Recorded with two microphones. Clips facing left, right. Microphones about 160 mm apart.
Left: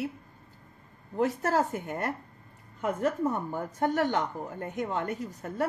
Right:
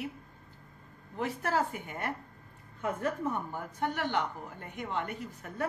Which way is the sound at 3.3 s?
45° left (ahead or behind).